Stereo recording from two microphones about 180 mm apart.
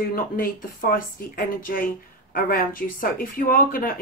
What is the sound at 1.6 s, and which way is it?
A woman's voice, 50° left (ahead or behind).